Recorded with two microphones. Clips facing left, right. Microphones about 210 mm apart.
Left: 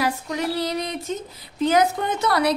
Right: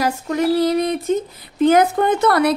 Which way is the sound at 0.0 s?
50° right (ahead or behind).